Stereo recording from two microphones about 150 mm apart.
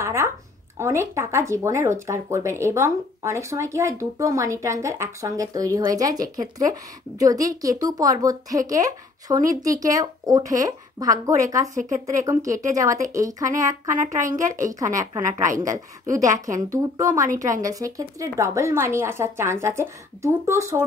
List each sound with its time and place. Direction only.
0.0 s a sound: 15° right (ahead or behind)
0.7 s speech: 20° right (ahead or behind)
11.7 s a woman's voice: 60° right (ahead or behind)
12.1 s speech: 20° right (ahead or behind)